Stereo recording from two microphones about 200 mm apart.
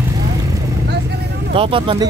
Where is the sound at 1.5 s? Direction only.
25° right (ahead or behind).